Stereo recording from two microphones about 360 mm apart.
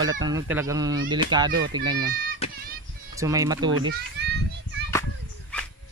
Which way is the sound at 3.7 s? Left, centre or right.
Right.